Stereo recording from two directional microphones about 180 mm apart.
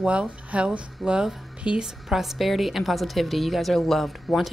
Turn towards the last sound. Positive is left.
turn(degrees=0)  # may be behind; listen again after turning